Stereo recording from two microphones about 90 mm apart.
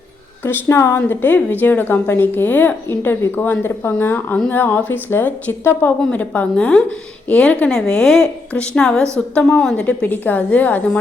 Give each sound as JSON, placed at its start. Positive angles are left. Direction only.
{"t": 0.4, "sound": "a woman's voice", "side_deg": 30}
{"t": 9.8, "sound": "speech", "side_deg": 20}